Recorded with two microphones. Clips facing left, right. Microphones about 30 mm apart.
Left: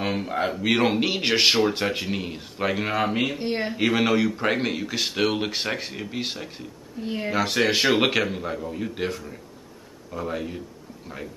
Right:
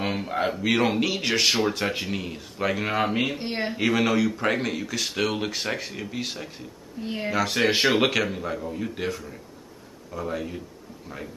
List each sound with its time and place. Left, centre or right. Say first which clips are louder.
0.0 s speech: left 1 dB; centre; by 1.6 s left
1.9 s speech: left 1 dB; centre
3.8 s speech: left 1 dB; centre
7.0 s speech: left 1 dB; centre
7.3 s speech: left 2 dB; centre
7.6 s speech: even; centre
8.1 s speech: left 1 dB; centre